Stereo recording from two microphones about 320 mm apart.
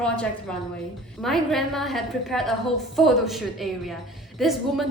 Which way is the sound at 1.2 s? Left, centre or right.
Centre.